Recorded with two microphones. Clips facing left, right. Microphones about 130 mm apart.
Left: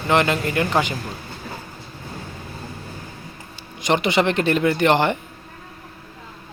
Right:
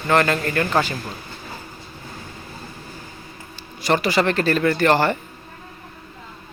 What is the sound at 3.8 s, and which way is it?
Speech, 20° left (ahead or behind).